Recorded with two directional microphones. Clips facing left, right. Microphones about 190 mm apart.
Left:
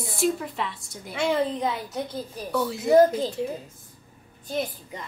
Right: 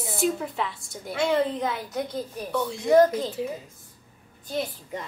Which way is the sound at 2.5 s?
5° left (ahead or behind).